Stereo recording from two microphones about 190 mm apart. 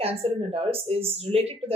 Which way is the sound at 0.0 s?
30° right (ahead or behind).